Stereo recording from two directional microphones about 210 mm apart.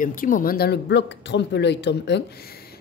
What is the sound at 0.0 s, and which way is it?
A woman's voice, 40° left (ahead or behind).